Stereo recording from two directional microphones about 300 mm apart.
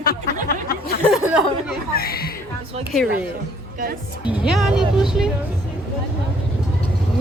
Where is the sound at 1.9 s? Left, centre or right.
Left.